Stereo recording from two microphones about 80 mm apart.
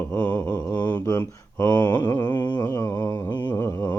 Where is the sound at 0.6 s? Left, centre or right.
Centre.